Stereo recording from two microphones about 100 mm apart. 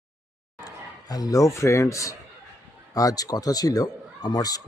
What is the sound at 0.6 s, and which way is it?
A man's voice, 40° left (ahead or behind).